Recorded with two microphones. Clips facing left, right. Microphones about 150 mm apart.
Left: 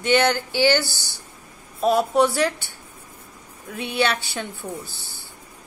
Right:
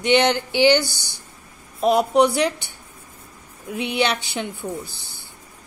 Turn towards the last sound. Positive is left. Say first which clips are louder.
# right 3 dB
turn(degrees=-15)  # may be behind; listen again after turning